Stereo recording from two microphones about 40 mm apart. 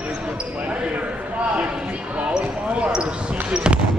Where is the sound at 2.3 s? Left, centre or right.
Right.